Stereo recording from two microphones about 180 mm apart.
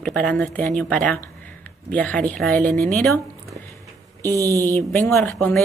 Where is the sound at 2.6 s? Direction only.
50° right (ahead or behind).